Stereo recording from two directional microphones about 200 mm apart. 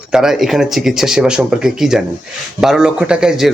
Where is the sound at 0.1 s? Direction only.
Centre (ahead or behind).